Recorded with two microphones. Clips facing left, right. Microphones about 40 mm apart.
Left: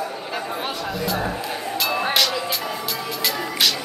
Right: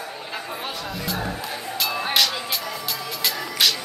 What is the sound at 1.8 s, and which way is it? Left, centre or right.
Music, centre.